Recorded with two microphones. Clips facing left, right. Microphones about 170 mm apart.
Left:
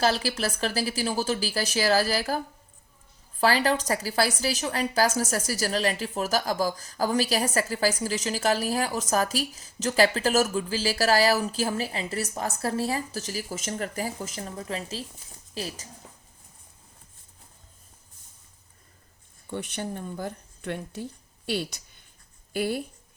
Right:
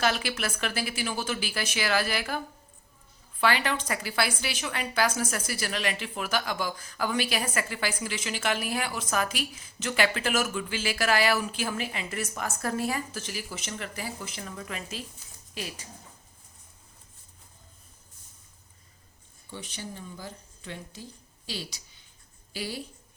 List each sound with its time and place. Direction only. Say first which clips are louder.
0.0 s a woman's voice: left 3 dB; 35° left (ahead or behind)
3.4 s a woman's voice: left 4 dB; 35° left (ahead or behind)
19.5 s speech: left 7 dB; 60° left (ahead or behind)